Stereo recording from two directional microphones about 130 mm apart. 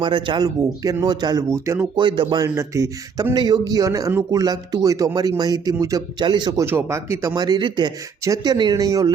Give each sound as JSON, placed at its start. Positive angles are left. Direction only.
{"t": 0.0, "sound": "a man's voice", "side_deg": -40}
{"t": 2.0, "sound": "a man's voice", "side_deg": -35}
{"t": 2.4, "sound": "a man's voice", "side_deg": -25}
{"t": 6.6, "sound": "a man's voice", "side_deg": -20}
{"t": 7.3, "sound": "a man's voice", "side_deg": -35}